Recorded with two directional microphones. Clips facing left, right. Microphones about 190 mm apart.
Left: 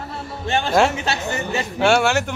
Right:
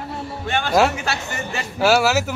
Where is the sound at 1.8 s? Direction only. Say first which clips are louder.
Right 1 dB; 5° right (ahead or behind).